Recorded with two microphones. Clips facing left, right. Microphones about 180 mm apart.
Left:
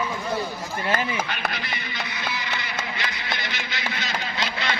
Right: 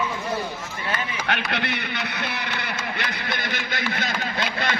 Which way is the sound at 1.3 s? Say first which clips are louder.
Right 4 dB; 70° right (ahead or behind).